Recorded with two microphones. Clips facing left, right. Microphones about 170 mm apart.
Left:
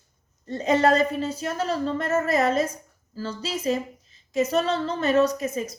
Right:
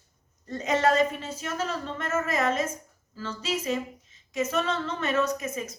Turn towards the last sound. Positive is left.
turn(degrees=35)  # may be behind; listen again after turning